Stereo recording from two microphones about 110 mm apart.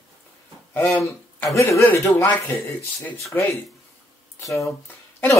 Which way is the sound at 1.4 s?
25° left (ahead or behind).